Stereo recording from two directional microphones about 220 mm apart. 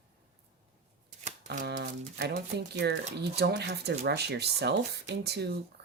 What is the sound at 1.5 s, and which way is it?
Speech, 50° right (ahead or behind).